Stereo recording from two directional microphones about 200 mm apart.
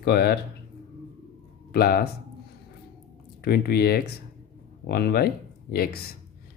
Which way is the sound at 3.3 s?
50° left (ahead or behind).